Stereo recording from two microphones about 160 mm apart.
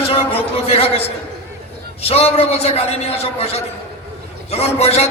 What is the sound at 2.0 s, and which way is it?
A man's voice, 40° left (ahead or behind).